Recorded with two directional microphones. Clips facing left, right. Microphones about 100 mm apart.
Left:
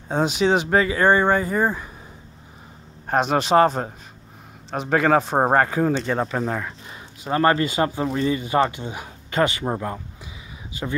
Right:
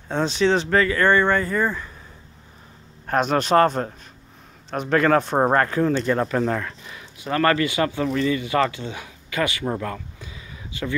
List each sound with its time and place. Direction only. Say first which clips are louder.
0.1 s speech: even; 10° left (ahead or behind)
3.1 s a man's voice: even; 5° left (ahead or behind)
6.9 s a sound: left 2 dB; 25° left (ahead or behind)
7.6 s speech: even; 35° left (ahead or behind)